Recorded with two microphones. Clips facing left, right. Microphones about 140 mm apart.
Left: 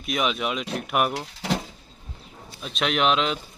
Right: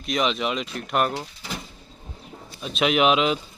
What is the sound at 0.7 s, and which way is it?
Mechanisms, 5° left (ahead or behind).